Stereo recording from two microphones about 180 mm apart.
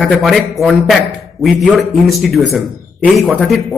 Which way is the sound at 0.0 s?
Centre (ahead or behind).